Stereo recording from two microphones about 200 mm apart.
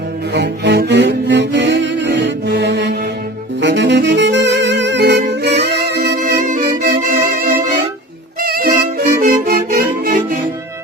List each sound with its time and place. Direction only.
0.3 s music: 60° right (ahead or behind)
3.6 s saxophone: 60° right (ahead or behind); by 7.5 s 45° right (ahead or behind)
8.4 s music: 50° right (ahead or behind)